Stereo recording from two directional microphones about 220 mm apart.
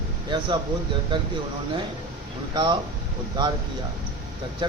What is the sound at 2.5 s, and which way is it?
Speech, 20° right (ahead or behind).